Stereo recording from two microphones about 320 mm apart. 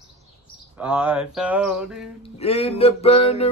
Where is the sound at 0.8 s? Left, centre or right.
Centre.